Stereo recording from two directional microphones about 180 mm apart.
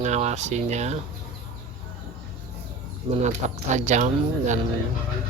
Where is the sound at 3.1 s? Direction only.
40° right (ahead or behind).